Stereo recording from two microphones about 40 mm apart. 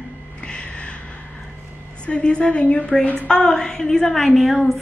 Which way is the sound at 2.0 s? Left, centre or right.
Left.